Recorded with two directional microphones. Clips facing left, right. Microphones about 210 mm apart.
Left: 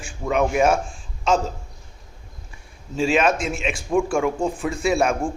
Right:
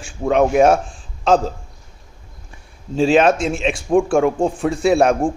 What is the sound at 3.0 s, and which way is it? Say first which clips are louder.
Speech: right 6 dB; 35° right (ahead or behind).